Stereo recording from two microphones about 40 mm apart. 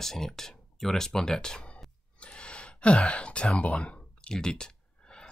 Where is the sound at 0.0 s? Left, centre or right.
Centre.